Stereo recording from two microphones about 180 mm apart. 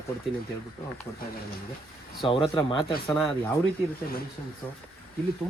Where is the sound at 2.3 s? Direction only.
25° left (ahead or behind).